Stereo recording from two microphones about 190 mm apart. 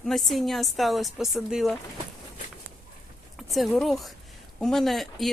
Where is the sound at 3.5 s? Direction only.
Centre (ahead or behind).